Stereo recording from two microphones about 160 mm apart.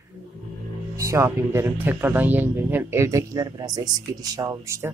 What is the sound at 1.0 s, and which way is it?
Speech, 20° right (ahead or behind).